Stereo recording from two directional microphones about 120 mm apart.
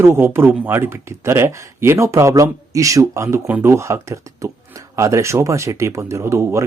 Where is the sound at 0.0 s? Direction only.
20° right (ahead or behind).